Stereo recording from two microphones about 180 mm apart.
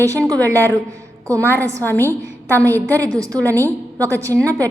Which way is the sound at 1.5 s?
15° right (ahead or behind).